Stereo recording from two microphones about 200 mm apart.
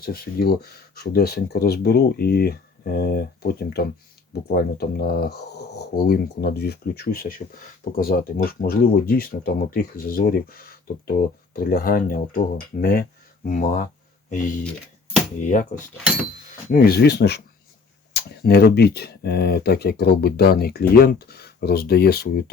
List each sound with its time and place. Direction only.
0.0 s speech: 50° left (ahead or behind)
15.4 s speech: 40° left (ahead or behind)
16.7 s speech: 50° left (ahead or behind)